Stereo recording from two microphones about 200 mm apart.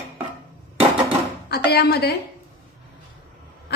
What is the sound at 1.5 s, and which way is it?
Speech, 50° left (ahead or behind).